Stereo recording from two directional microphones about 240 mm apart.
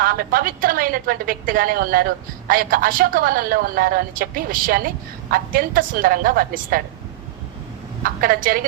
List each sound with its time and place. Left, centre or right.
0.0 s a woman's voice: right
8.0 s a woman's voice: right